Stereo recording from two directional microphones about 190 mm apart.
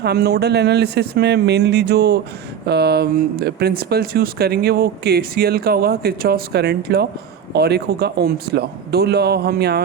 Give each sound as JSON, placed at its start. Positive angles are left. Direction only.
{"t": 0.0, "sound": "speech", "side_deg": -60}